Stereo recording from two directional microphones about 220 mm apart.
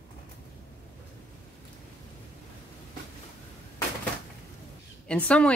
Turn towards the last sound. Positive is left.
turn(degrees=5)  # may be behind; listen again after turning